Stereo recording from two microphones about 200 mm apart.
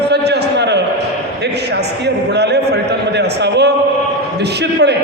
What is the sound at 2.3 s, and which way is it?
A man's voice, 55° right (ahead or behind).